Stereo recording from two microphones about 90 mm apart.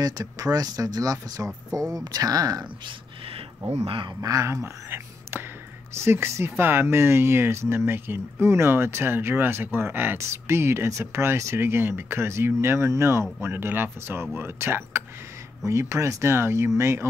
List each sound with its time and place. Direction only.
0.0 s speech: 40° right (ahead or behind)
3.8 s speech: 75° right (ahead or behind)
4.2 s speech: 35° right (ahead or behind)